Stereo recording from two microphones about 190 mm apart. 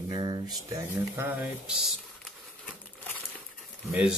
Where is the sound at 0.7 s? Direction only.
10° right (ahead or behind).